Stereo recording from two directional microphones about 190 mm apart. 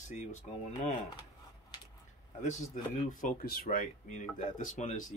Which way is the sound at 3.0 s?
45° left (ahead or behind).